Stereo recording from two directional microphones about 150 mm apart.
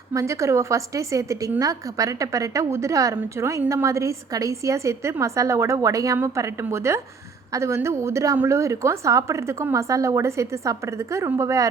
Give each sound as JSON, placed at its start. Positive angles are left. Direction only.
{"t": 0.1, "sound": "a woman's voice", "side_deg": -20}